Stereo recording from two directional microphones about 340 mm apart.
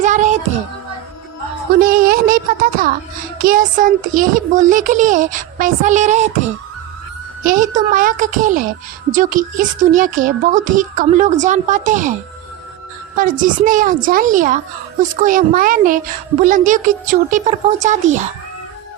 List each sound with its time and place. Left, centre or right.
0.0 s music: right
1.8 s a sound: right
3.4 s speech: right
7.4 s speech: right
13.4 s speech: right